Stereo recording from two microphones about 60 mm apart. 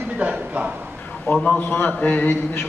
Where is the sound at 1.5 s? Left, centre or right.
Left.